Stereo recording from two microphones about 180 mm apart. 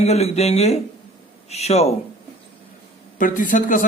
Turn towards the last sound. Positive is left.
turn(degrees=45)  # may be behind; listen again after turning